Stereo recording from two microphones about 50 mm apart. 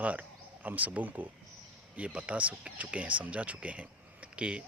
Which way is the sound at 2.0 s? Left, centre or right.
Right.